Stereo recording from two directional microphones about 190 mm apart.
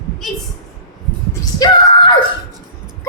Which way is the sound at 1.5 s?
25° left (ahead or behind).